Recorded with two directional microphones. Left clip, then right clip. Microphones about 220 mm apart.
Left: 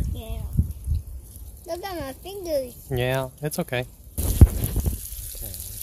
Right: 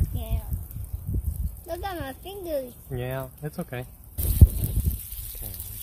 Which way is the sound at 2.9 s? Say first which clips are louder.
Left 8 dB; 55° left (ahead or behind).